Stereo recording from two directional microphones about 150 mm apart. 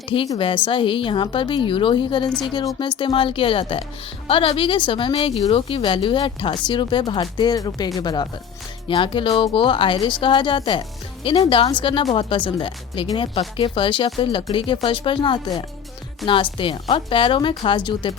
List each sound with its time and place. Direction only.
0.3 s speech: 35° left (ahead or behind)